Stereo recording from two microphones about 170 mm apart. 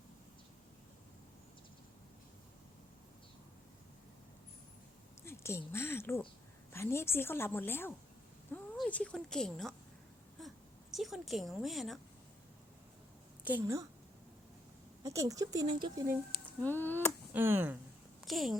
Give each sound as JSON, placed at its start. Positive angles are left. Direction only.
{"t": 5.2, "sound": "a woman's voice", "side_deg": 15}
{"t": 10.4, "sound": "whimper", "side_deg": 0}
{"t": 10.9, "sound": "speech", "side_deg": 0}
{"t": 13.4, "sound": "a woman's voice", "side_deg": -15}
{"t": 15.0, "sound": "speech", "side_deg": -20}
{"t": 16.5, "sound": "speech", "side_deg": 10}
{"t": 17.3, "sound": "speech", "side_deg": -10}
{"t": 18.3, "sound": "speech", "side_deg": 0}